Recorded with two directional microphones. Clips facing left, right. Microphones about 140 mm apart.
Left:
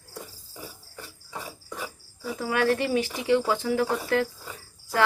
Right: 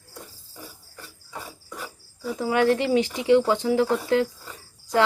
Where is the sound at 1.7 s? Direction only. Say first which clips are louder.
Left 1 dB; 5° left (ahead or behind).